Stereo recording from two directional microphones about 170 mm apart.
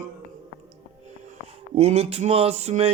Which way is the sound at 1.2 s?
40° right (ahead or behind).